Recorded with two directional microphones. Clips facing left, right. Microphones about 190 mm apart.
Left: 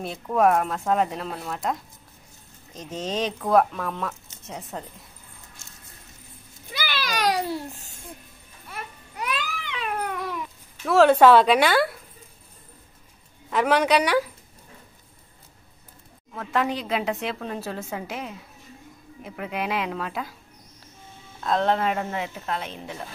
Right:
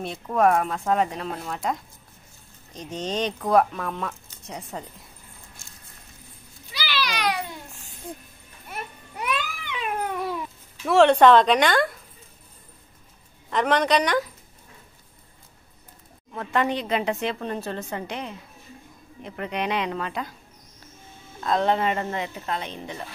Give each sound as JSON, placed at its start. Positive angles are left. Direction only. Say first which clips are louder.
{"t": 0.0, "sound": "speech", "louder": "even", "side_deg": 0}
{"t": 6.7, "sound": "a sound", "louder": "even", "side_deg": 50}
{"t": 9.3, "sound": "cat", "louder": "right 2 dB", "side_deg": -20}
{"t": 10.9, "sound": "speech", "louder": "even", "side_deg": 0}
{"t": 13.5, "sound": "speech", "louder": "left 1 dB", "side_deg": 5}
{"t": 16.3, "sound": "speech", "louder": "right 1 dB", "side_deg": 0}
{"t": 21.4, "sound": "speech", "louder": "even", "side_deg": 0}